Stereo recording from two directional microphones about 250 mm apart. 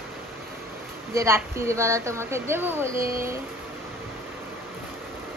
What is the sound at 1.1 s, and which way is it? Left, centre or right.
A woman's voice, centre.